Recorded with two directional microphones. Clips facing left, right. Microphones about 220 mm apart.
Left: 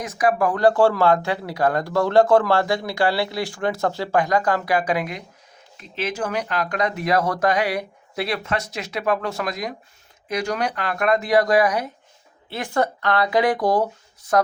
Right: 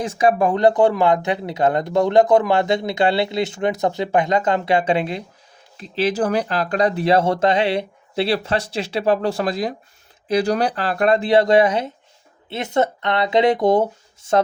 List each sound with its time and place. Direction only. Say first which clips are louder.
0.0 s speech: right 3 dB; 25° right (ahead or behind)